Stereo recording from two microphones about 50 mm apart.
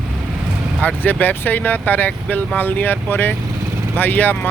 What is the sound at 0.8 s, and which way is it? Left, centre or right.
Speech, left.